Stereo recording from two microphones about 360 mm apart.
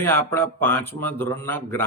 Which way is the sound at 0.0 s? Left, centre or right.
Centre.